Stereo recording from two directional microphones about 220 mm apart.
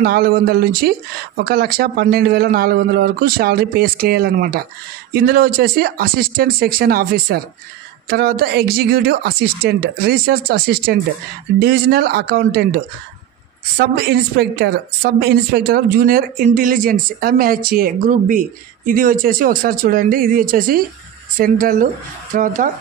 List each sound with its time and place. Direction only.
0.0 s speech: 45° right (ahead or behind)